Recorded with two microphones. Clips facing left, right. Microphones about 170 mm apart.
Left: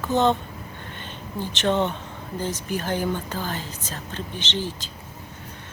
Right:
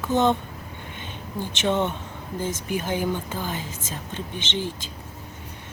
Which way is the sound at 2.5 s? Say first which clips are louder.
Even; 50° right (ahead or behind).